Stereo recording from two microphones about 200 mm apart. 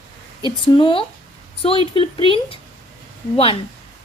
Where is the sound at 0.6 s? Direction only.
25° left (ahead or behind).